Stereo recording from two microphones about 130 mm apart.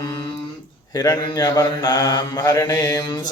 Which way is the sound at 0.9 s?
30° left (ahead or behind).